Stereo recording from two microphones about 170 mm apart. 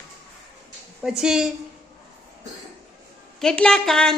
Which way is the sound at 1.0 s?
5° right (ahead or behind).